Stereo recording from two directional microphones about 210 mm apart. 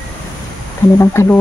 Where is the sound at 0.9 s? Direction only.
15° left (ahead or behind).